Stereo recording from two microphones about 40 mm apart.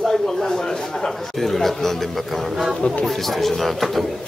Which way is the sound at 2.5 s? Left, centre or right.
Centre.